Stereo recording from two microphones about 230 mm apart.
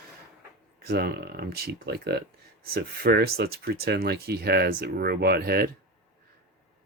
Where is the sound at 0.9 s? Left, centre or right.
Right.